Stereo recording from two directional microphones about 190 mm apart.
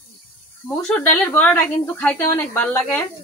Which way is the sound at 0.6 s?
10° left (ahead or behind).